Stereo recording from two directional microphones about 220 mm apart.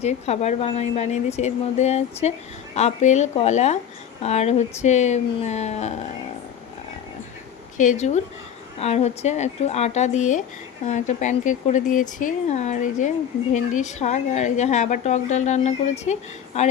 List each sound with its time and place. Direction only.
0.0 s a woman's voice: 30° left (ahead or behind)
7.8 s speech: 35° left (ahead or behind)